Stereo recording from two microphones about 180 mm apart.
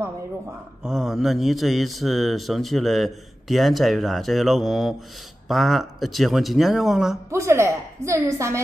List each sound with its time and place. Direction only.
0.0 s a man's voice: 5° right (ahead or behind)
7.2 s a woman's voice: 15° right (ahead or behind)